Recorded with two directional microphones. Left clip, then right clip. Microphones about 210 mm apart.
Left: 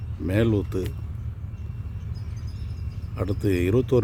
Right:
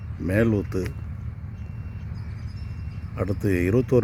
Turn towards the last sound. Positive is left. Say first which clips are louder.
# even
turn(degrees=-5)  # may be behind; listen again after turning